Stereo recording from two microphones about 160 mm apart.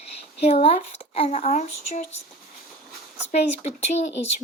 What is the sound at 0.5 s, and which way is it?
Female singing, 35° left (ahead or behind).